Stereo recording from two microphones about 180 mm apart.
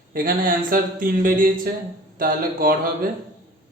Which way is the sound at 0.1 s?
50° right (ahead or behind).